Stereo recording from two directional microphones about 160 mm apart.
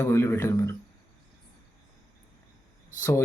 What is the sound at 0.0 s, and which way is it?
Speech, 15° left (ahead or behind).